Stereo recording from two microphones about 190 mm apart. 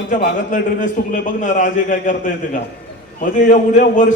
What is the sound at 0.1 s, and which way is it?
A man's voice, 45° left (ahead or behind).